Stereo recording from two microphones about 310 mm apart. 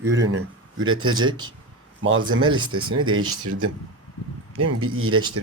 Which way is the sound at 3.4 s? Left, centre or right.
Right.